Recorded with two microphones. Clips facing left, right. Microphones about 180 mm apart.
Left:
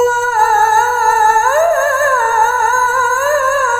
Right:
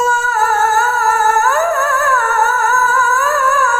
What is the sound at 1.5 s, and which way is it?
Music, 40° left (ahead or behind).